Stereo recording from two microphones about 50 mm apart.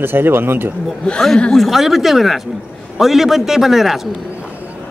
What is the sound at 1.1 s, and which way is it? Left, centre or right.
Speech, centre.